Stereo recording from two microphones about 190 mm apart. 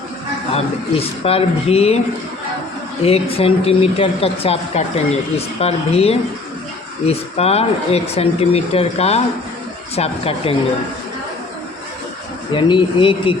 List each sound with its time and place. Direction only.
0.5 s speech: 30° left (ahead or behind)
3.0 s speech: 30° left (ahead or behind)
12.5 s speech: 25° left (ahead or behind)